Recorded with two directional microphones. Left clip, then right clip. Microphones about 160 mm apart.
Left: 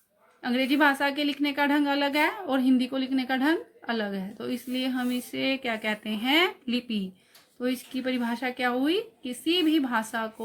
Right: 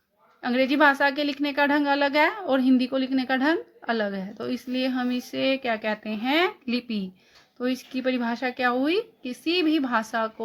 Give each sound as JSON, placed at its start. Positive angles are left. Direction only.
{"t": 0.4, "sound": "a woman's voice", "side_deg": -45}